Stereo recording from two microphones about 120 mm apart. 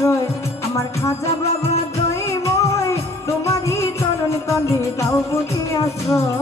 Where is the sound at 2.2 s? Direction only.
25° left (ahead or behind).